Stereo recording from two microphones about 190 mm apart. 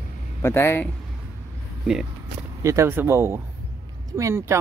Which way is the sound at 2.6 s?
15° right (ahead or behind).